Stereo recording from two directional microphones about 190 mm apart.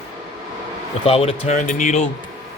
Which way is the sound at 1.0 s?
30° left (ahead or behind).